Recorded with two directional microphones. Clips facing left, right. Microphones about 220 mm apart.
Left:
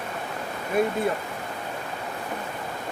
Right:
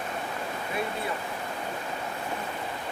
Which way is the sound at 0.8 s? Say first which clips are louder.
Left 10 dB; 45° left (ahead or behind).